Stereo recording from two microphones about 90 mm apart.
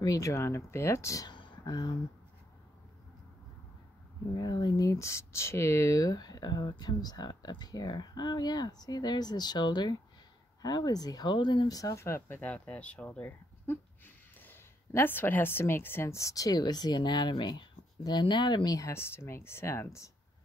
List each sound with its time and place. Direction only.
0.0 s speech: 40° left (ahead or behind)
1.2 s a sound: 55° left (ahead or behind)
4.4 s speech: 50° left (ahead or behind)
11.3 s speech: 60° left (ahead or behind)
11.7 s speech: 40° left (ahead or behind)
12.4 s speech: 15° left (ahead or behind); by 18.8 s 55° left (ahead or behind)
18.8 s speech: 30° left (ahead or behind)